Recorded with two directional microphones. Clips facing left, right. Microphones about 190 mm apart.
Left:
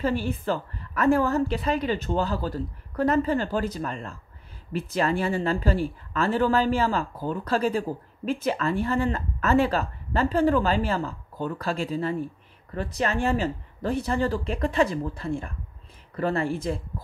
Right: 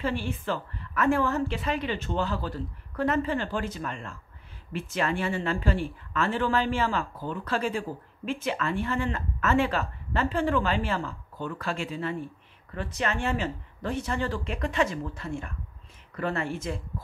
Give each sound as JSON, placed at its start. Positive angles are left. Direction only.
{"t": 0.0, "sound": "a woman's voice", "side_deg": 40}